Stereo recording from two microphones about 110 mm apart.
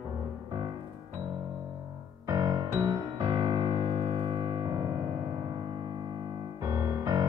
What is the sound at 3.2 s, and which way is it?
Keyboard, 40° right (ahead or behind).